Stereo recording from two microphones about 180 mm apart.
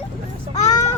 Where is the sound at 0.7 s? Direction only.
15° left (ahead or behind).